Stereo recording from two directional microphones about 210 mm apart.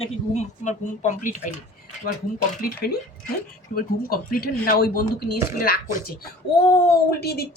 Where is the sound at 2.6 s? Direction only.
45° left (ahead or behind).